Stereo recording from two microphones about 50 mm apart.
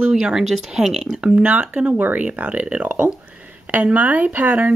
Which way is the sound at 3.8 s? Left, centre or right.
Right.